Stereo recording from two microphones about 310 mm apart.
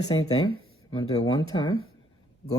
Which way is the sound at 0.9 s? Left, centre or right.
Centre.